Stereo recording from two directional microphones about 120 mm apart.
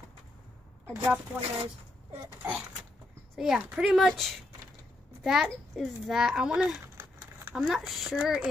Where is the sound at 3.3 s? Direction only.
5° right (ahead or behind).